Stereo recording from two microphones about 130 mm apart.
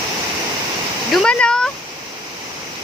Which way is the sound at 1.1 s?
5° left (ahead or behind).